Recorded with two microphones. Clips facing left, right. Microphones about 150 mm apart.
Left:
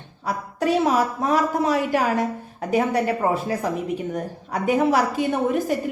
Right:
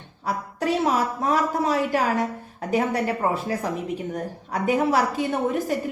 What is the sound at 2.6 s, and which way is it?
A woman's voice, 20° left (ahead or behind).